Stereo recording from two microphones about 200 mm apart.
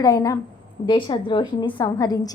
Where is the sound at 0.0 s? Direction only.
20° left (ahead or behind).